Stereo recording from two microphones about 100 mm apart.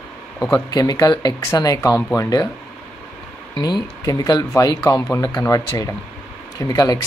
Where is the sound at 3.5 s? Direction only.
45° left (ahead or behind).